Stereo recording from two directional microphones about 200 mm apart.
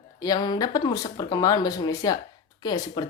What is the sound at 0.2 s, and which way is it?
Speech, 20° left (ahead or behind).